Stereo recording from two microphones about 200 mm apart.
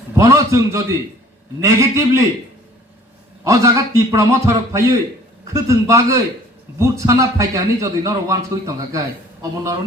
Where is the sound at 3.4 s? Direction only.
15° right (ahead or behind).